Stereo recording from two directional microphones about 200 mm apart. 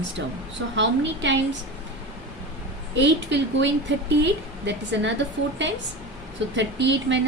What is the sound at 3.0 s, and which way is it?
Speech, 65° right (ahead or behind).